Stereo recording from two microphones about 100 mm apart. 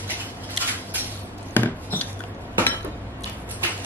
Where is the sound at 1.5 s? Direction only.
20° left (ahead or behind).